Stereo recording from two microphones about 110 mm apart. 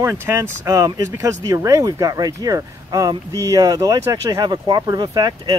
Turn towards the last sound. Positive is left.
turn(degrees=-40)  # may be behind; listen again after turning